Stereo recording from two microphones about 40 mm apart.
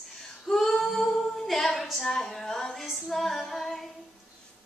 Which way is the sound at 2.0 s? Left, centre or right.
Centre.